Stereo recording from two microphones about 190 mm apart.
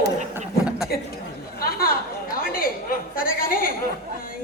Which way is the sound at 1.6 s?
50° left (ahead or behind).